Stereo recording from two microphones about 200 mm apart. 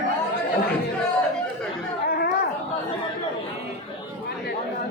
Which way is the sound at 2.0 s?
50° left (ahead or behind).